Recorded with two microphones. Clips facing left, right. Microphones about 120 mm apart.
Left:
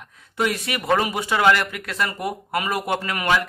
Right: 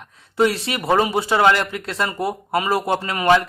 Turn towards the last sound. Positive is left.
turn(degrees=-30)  # may be behind; listen again after turning